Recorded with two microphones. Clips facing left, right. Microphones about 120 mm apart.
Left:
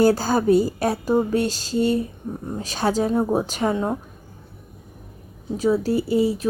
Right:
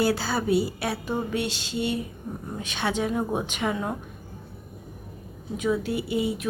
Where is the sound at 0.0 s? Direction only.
40° left (ahead or behind).